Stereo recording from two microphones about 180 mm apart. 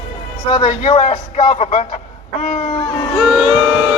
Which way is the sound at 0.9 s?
35° left (ahead or behind).